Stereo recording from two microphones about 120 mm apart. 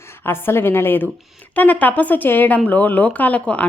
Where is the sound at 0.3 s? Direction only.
20° left (ahead or behind).